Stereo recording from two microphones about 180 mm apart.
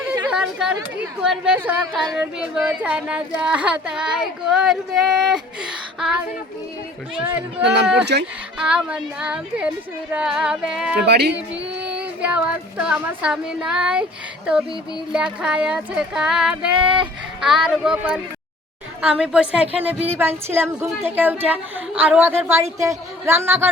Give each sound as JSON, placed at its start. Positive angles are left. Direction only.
{"t": 0.0, "sound": "chatter", "side_deg": -5}
{"t": 1.2, "sound": "speech", "side_deg": -5}
{"t": 7.6, "sound": "speech", "side_deg": -70}
{"t": 8.5, "sound": "speech", "side_deg": -5}
{"t": 11.0, "sound": "speech", "side_deg": -65}
{"t": 11.8, "sound": "speech", "side_deg": -5}
{"t": 15.1, "sound": "speech", "side_deg": -5}